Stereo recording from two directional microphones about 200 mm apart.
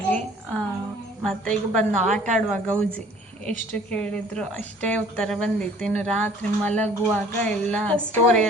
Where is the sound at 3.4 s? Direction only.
5° left (ahead or behind).